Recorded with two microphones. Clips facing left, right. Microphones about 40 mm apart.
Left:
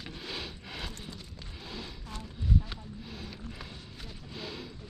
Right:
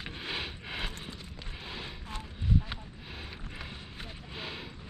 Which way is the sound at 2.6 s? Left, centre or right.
Right.